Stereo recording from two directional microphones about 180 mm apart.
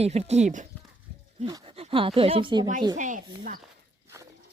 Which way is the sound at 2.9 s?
45° right (ahead or behind).